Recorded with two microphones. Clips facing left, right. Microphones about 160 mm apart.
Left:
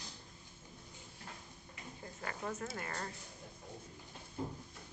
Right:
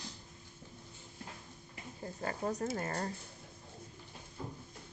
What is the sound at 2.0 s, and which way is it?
Speech, 35° right (ahead or behind).